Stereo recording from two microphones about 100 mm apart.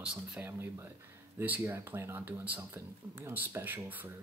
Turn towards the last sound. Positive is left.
turn(degrees=-20)  # may be behind; listen again after turning